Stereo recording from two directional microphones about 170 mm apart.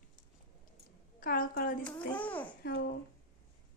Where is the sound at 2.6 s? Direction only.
65° left (ahead or behind).